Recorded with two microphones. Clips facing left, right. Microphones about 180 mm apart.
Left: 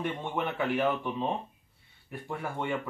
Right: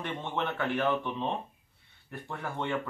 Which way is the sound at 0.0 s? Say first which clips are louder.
Left 2 dB; 10° left (ahead or behind).